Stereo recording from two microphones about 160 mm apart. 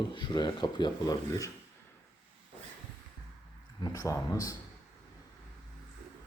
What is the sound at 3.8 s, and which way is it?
Speech, 20° left (ahead or behind).